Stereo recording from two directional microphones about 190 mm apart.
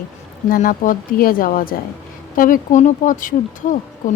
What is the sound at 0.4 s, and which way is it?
Speech, 45° left (ahead or behind).